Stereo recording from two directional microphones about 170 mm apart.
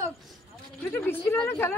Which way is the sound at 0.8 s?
15° left (ahead or behind).